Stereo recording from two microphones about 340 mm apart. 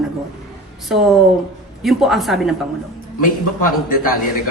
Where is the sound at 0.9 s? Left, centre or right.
Centre.